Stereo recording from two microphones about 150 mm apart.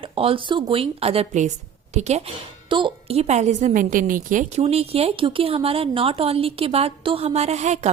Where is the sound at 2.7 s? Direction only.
35° right (ahead or behind).